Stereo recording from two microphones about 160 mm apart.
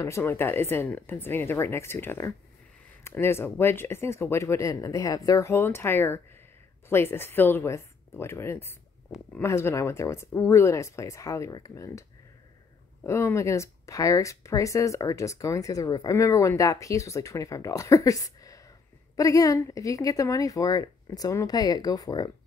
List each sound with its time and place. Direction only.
0.0 s speech: 15° left (ahead or behind)
13.0 s speech: 15° left (ahead or behind)